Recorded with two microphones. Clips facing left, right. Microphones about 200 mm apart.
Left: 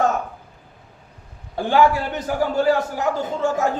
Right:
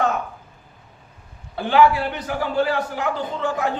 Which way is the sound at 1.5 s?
45° left (ahead or behind).